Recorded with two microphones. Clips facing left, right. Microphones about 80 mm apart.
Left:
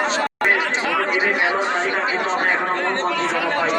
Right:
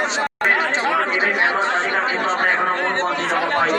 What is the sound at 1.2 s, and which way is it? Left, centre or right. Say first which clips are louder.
Speech: right 1 dB; right.